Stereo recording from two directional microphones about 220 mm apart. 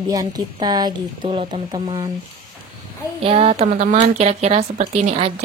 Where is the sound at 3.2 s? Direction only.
25° right (ahead or behind).